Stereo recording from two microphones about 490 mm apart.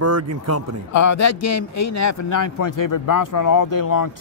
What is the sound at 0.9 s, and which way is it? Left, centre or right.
Speech, left.